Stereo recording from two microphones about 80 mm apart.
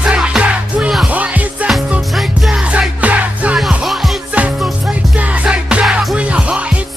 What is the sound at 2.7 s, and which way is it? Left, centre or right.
Music, centre.